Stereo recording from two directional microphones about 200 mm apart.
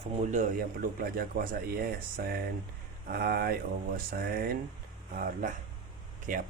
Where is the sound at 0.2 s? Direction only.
40° right (ahead or behind).